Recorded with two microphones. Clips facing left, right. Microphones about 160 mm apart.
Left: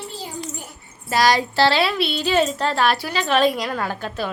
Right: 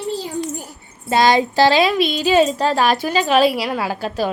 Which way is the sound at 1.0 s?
25° right (ahead or behind).